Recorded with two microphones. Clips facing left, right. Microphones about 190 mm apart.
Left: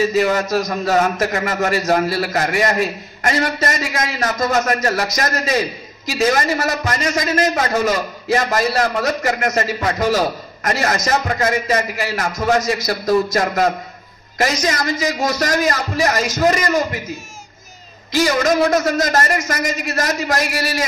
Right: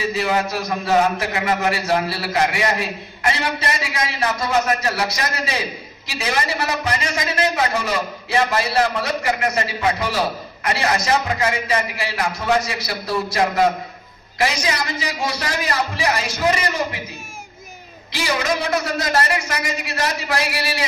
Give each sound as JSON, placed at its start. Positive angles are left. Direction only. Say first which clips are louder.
{"t": 0.0, "sound": "a man's voice", "louder": "left 5 dB", "side_deg": 45}
{"t": 18.1, "sound": "a man's voice", "louder": "left 6 dB", "side_deg": 45}